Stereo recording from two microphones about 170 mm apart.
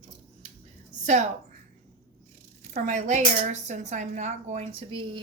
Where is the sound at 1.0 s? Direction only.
45° right (ahead or behind).